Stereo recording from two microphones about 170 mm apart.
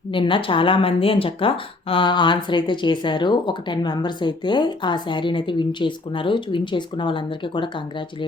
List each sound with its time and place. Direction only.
0.1 s speech: 30° left (ahead or behind)